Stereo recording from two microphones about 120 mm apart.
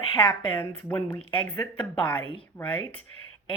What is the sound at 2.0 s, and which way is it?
Speech, 45° left (ahead or behind).